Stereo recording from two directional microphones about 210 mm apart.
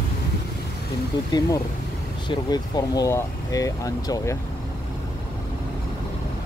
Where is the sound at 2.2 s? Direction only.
20° left (ahead or behind).